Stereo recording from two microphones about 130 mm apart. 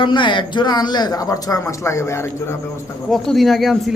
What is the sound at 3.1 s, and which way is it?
Speech, centre (ahead or behind).